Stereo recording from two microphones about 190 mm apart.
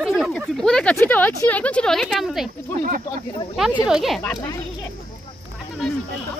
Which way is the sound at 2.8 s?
45° right (ahead or behind).